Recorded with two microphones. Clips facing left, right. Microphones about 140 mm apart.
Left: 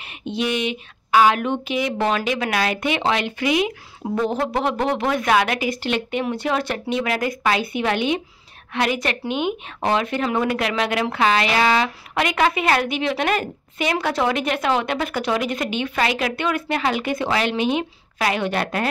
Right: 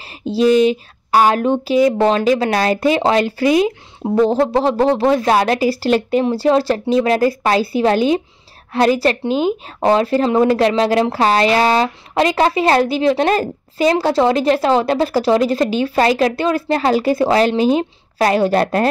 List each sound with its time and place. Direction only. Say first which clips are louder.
0.0 s speech: right 10 dB; 35° right (ahead or behind)